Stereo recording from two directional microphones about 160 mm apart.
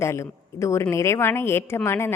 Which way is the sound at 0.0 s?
15° left (ahead or behind).